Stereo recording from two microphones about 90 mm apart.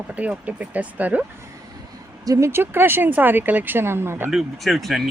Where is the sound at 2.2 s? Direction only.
40° right (ahead or behind).